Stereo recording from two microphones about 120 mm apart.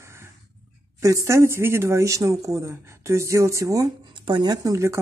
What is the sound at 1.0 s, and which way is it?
Speech, 25° right (ahead or behind).